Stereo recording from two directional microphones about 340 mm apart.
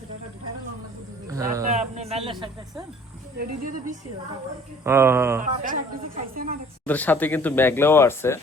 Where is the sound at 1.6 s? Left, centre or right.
Centre.